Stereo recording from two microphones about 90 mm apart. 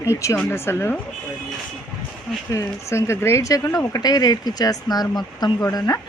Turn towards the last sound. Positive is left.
turn(degrees=40)  # may be behind; listen again after turning